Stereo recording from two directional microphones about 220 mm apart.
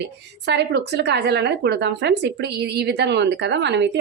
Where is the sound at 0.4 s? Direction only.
50° right (ahead or behind).